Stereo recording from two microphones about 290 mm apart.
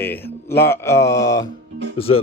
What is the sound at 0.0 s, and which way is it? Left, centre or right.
Speech, centre.